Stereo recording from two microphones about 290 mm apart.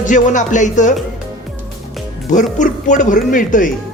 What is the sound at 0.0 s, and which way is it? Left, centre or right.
Speech, left.